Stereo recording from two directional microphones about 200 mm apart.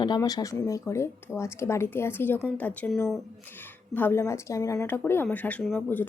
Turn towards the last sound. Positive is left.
turn(degrees=10)  # may be behind; listen again after turning